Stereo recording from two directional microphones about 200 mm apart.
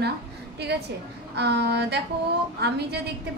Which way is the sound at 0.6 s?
55° right (ahead or behind).